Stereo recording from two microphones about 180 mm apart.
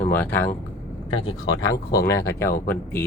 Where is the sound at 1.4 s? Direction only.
90° left.